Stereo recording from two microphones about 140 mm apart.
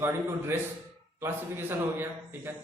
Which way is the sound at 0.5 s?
15° right (ahead or behind).